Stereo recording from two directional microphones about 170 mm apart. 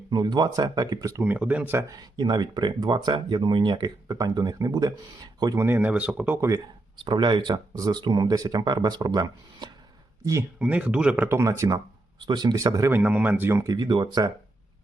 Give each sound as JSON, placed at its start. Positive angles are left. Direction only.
{"t": 0.1, "sound": "speech", "side_deg": -25}
{"t": 2.1, "sound": "speech", "side_deg": -25}
{"t": 5.6, "sound": "speech", "side_deg": -10}
{"t": 7.0, "sound": "speech", "side_deg": -25}
{"t": 10.6, "sound": "speech", "side_deg": -10}